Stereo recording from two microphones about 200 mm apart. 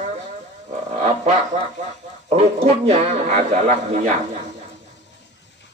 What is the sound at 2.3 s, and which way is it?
A man's voice, 30° right (ahead or behind).